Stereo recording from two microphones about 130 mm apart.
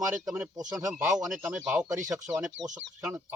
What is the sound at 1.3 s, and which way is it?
Speech, 5° right (ahead or behind).